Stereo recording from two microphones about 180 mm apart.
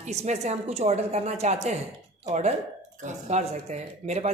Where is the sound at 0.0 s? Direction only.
40° right (ahead or behind).